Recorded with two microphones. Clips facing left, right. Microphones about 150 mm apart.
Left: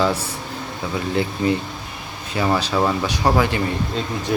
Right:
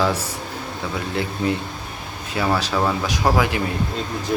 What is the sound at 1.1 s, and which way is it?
Speech, centre (ahead or behind).